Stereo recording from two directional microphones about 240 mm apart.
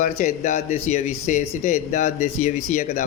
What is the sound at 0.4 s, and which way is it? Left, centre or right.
A man's voice, left.